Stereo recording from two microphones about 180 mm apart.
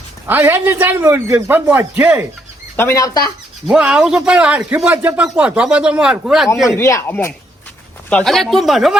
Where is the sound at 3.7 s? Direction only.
5° right (ahead or behind).